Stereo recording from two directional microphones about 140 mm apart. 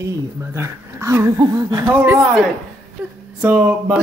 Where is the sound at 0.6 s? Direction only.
20° right (ahead or behind).